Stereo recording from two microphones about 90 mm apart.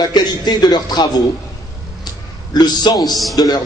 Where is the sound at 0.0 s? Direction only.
50° left (ahead or behind).